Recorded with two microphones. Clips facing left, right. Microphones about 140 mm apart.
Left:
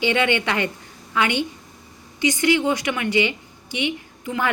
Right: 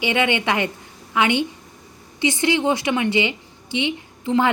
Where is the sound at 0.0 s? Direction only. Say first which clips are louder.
Even; 15° right (ahead or behind).